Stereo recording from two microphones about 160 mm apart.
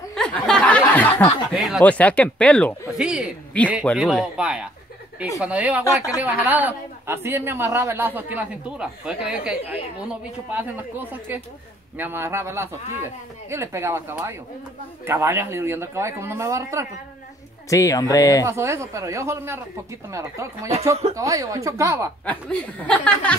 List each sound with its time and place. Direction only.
0.1 s a sound: 5° left (ahead or behind)
1.5 s speech: 5° right (ahead or behind)
1.9 s a woman's voice: 10° left (ahead or behind)
3.0 s speech: 5° right (ahead or behind)
3.6 s a woman's voice: 10° left (ahead or behind)
3.9 s a man's voice: 5° right (ahead or behind)
5.9 s speech: 20° left (ahead or behind)
6.2 s a man's voice: 10° right (ahead or behind)
17.6 s speech: 20° left (ahead or behind)
18.4 s a man's voice: 15° right (ahead or behind)
22.2 s a woman's voice: 10° left (ahead or behind)